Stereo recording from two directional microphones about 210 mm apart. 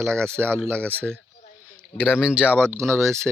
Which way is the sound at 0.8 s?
5° left (ahead or behind).